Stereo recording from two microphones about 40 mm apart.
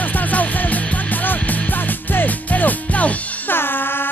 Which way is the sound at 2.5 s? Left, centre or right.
Left.